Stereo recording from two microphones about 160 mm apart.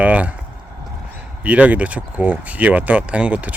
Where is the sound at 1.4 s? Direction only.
10° right (ahead or behind).